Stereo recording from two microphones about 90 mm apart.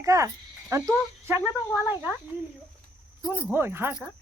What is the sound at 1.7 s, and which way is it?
Speech, 20° right (ahead or behind).